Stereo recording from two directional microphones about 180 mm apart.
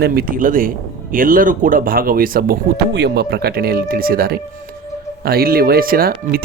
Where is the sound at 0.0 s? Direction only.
55° right (ahead or behind).